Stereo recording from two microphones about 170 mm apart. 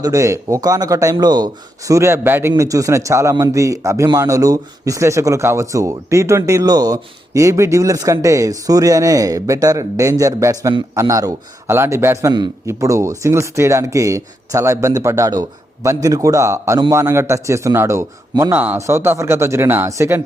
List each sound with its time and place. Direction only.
0.0 s a man's voice: 20° right (ahead or behind)